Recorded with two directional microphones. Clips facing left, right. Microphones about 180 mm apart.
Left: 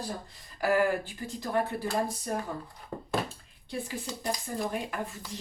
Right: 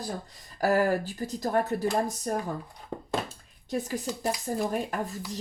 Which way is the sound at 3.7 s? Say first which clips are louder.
Right 5 dB; 40° right (ahead or behind).